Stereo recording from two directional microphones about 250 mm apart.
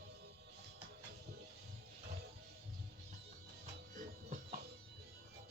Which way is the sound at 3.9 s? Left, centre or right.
Right.